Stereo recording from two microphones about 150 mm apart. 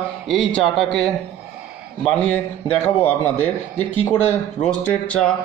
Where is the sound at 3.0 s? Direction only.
15° left (ahead or behind).